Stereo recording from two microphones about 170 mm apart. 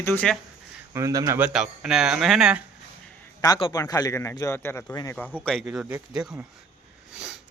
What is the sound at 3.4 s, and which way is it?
A man's voice, 25° left (ahead or behind).